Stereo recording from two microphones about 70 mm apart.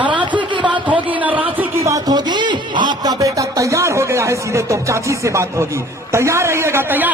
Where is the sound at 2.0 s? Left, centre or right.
Right.